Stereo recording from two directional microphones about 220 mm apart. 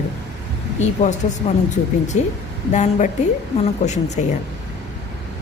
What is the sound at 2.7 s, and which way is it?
Speech, 35° left (ahead or behind).